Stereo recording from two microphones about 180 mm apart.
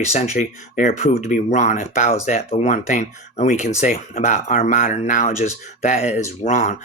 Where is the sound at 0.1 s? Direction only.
40° left (ahead or behind).